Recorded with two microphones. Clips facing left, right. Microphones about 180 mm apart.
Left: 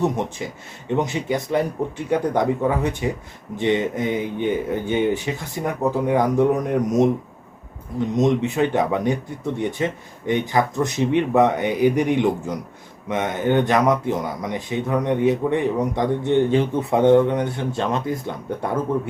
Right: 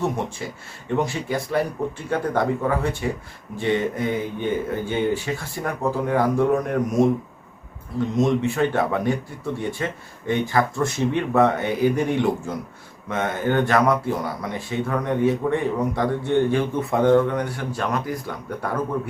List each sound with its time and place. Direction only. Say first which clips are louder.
0.0 s speech: left 3 dB; 20° left (ahead or behind)